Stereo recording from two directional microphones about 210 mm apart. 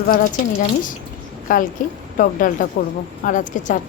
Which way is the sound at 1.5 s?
40° left (ahead or behind).